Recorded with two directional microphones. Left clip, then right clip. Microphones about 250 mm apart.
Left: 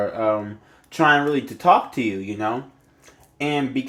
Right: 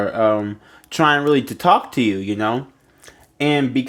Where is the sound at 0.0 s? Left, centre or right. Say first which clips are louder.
Right 4 dB; right.